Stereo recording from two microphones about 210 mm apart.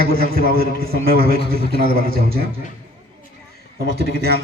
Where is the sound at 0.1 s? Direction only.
45° right (ahead or behind).